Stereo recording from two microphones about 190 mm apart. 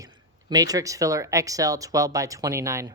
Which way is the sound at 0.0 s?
20° right (ahead or behind).